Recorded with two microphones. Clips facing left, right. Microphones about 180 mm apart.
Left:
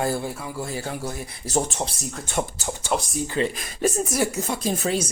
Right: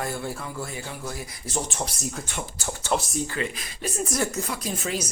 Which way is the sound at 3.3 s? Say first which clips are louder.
Left 6 dB; 30° left (ahead or behind).